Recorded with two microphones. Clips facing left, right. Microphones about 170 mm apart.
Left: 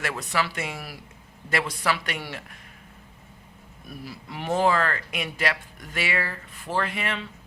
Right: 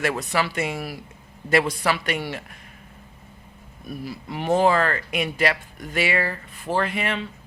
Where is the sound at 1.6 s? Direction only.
50° right (ahead or behind).